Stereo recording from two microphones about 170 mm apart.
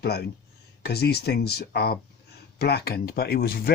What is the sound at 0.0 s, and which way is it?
Speech, 70° left (ahead or behind).